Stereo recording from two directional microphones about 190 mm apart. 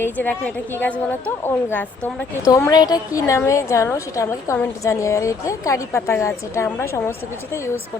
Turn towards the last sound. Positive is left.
turn(degrees=15)  # may be behind; listen again after turning